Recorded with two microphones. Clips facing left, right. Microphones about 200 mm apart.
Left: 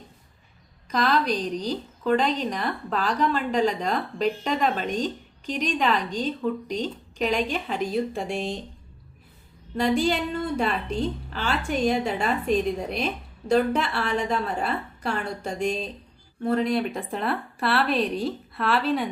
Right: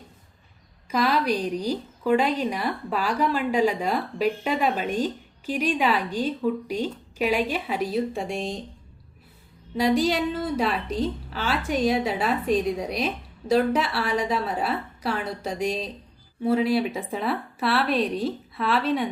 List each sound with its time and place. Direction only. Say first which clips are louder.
0.9 s a woman's voice: right 1 dB; 10° right (ahead or behind)
9.7 s a woman's voice: right 1 dB; centre (ahead or behind)